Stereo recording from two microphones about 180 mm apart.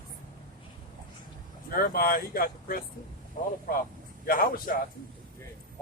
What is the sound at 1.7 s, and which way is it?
A man's voice, 55° left (ahead or behind).